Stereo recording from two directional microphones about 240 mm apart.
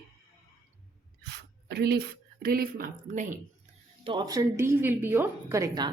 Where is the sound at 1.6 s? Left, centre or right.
Right.